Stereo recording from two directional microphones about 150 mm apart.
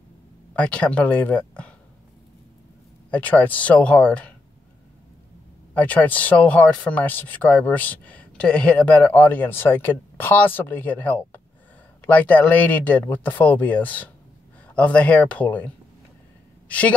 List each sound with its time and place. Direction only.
0.6 s speech: 10° left (ahead or behind)
3.1 s speech: 10° left (ahead or behind)
5.8 s a woman's voice: 10° left (ahead or behind)